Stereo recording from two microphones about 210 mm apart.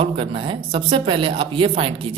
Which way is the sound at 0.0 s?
25° right (ahead or behind).